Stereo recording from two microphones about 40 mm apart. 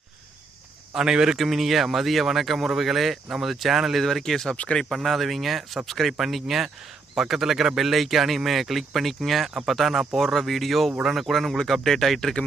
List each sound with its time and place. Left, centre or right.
0.9 s speech: centre
1.4 s speech: centre
4.3 s speech: centre
11.6 s speech: centre